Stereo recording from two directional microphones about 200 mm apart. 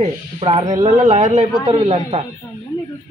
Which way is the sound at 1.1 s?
35° right (ahead or behind).